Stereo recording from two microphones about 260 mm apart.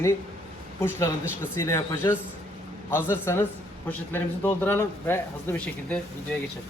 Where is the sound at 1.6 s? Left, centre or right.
Centre.